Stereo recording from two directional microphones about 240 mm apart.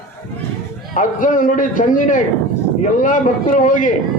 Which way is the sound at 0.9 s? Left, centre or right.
Left.